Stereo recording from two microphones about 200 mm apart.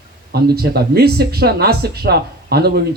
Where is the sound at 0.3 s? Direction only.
50° right (ahead or behind).